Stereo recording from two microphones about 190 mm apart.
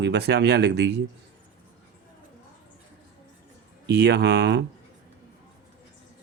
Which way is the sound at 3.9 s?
60° right (ahead or behind).